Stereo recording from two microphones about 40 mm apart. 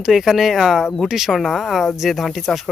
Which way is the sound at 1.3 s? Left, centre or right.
Centre.